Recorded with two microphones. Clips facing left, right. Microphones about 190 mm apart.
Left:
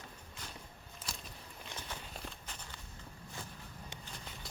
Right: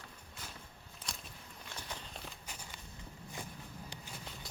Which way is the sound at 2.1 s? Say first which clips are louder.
Left 1 dB; 5° right (ahead or behind).